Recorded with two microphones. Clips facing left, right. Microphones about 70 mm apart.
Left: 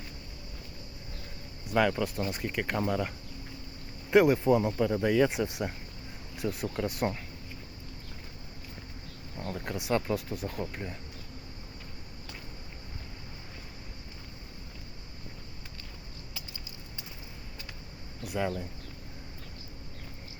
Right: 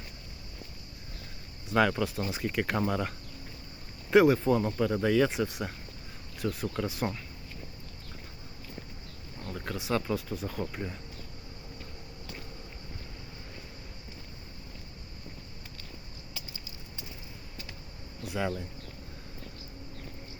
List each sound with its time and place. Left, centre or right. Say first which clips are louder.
1.7 s speech: right 1 dB; centre
9.6 s speech: left 1 dB; centre
18.2 s speech: left 1 dB; centre